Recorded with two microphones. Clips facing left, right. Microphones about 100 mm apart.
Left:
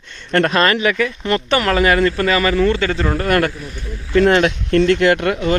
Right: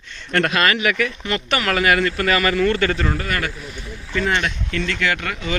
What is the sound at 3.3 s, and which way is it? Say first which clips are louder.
Speech: left 9 dB; 60° left (ahead or behind).